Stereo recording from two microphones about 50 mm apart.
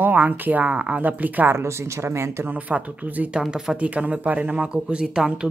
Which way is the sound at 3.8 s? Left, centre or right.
Right.